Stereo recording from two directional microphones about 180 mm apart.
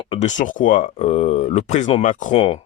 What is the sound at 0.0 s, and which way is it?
Speech, 35° left (ahead or behind).